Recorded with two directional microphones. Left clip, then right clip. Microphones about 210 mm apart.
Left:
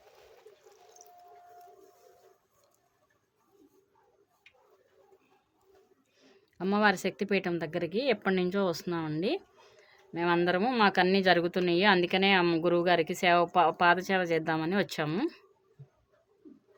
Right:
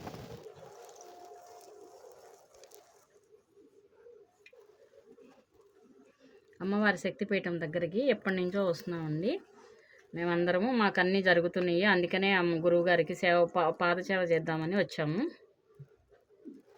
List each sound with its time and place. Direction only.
6.2 s speech: 55° left (ahead or behind)